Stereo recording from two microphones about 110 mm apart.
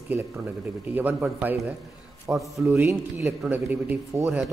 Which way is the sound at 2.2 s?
Centre (ahead or behind).